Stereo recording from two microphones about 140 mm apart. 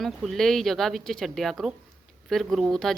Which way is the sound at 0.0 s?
Centre (ahead or behind).